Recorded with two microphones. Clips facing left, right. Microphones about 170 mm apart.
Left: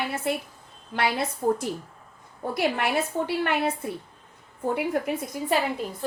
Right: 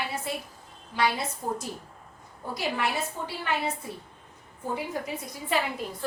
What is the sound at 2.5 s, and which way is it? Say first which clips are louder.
A woman's voice: left 4 dB; 60° left (ahead or behind).